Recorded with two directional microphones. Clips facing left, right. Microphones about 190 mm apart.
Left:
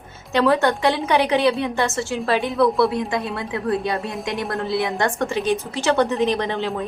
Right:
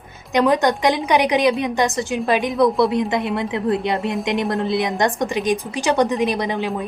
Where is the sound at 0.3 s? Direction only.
15° right (ahead or behind).